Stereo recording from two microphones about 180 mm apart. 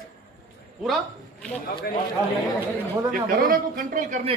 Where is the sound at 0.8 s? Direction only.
5° left (ahead or behind).